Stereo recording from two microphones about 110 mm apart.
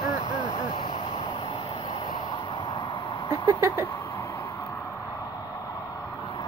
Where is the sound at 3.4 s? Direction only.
25° right (ahead or behind).